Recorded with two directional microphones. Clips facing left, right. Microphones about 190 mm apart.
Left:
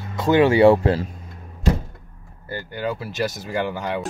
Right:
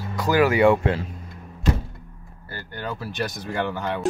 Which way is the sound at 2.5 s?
10° left (ahead or behind).